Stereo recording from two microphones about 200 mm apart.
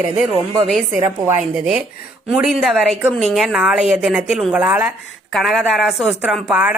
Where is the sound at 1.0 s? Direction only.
10° right (ahead or behind).